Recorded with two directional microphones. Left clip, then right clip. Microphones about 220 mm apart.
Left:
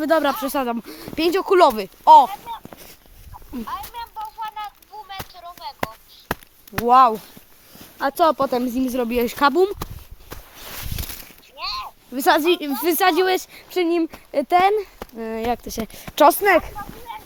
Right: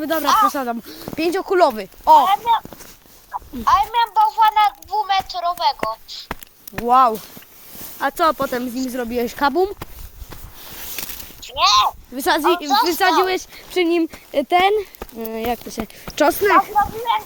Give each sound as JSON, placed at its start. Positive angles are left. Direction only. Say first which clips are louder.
{"t": 0.0, "sound": "speech", "louder": "right 3 dB", "side_deg": 15}
{"t": 2.3, "sound": "speech", "louder": "right 15 dB", "side_deg": -45}
{"t": 3.3, "sound": "a sound", "louder": "right 15 dB", "side_deg": -45}
{"t": 3.7, "sound": "a child's voice", "louder": "right 17 dB", "side_deg": -40}
{"t": 6.8, "sound": "speech", "louder": "even", "side_deg": 0}
{"t": 8.9, "sound": "speech", "louder": "even", "side_deg": 10}
{"t": 10.9, "sound": "a sound", "louder": "right 3 dB", "side_deg": -40}
{"t": 12.1, "sound": "speech", "louder": "left 2 dB", "side_deg": 5}
{"t": 13.7, "sound": "speech", "louder": "right 3 dB", "side_deg": 0}
{"t": 15.6, "sound": "speech", "louder": "right 1 dB", "side_deg": 25}
{"t": 16.7, "sound": "speech", "louder": "right 16 dB", "side_deg": -45}